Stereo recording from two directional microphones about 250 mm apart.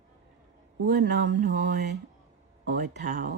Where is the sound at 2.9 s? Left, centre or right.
Right.